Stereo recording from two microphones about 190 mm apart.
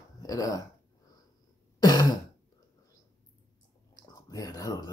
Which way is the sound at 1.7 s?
20° left (ahead or behind).